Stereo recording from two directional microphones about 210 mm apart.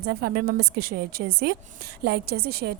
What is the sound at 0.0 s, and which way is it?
A woman's voice, 50° right (ahead or behind).